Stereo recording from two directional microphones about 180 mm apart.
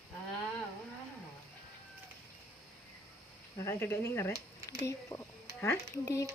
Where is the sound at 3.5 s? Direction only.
15° left (ahead or behind).